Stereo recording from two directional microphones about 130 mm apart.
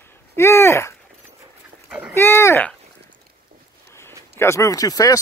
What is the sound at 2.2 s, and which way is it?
Speech, 20° left (ahead or behind).